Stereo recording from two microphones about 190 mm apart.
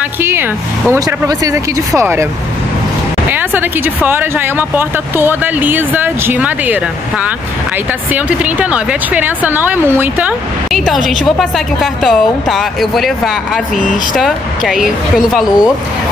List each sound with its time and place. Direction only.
0.2 s speech: 10° right (ahead or behind)
3.3 s speech: 10° right (ahead or behind)